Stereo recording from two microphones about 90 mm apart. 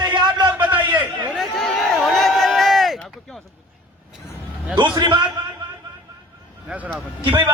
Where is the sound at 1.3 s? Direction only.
5° left (ahead or behind).